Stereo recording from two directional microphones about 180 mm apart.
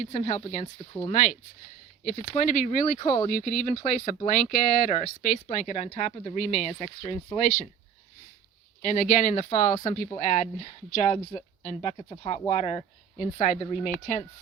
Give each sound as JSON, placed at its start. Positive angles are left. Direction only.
{"t": 0.0, "sound": "speech", "side_deg": 40}
{"t": 0.6, "sound": "speech", "side_deg": 25}
{"t": 1.1, "sound": "speech", "side_deg": 45}
{"t": 3.2, "sound": "speech", "side_deg": 50}
{"t": 8.8, "sound": "speech", "side_deg": 45}